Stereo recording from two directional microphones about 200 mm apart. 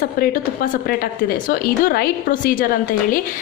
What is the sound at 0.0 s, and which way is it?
A woman's voice, 45° left (ahead or behind).